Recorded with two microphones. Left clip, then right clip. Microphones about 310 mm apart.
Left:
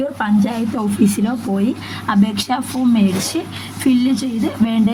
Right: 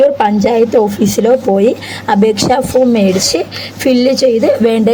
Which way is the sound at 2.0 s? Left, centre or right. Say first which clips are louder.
Right 9 dB; centre.